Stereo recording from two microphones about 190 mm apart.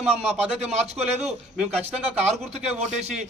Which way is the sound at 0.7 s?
35° right (ahead or behind).